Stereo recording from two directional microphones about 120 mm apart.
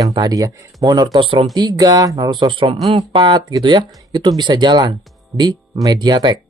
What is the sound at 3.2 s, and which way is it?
Speech, 35° right (ahead or behind).